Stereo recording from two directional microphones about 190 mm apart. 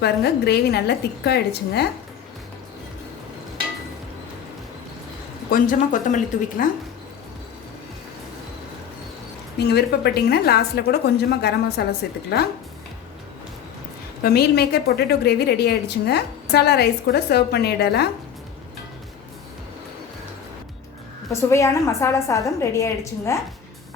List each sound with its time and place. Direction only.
0.0 s a woman's voice: 60° left (ahead or behind)
5.5 s speech: 45° left (ahead or behind)
9.6 s a woman's voice: 60° left (ahead or behind)
14.2 s a woman's voice: 55° left (ahead or behind)
21.2 s a woman's voice: 15° left (ahead or behind)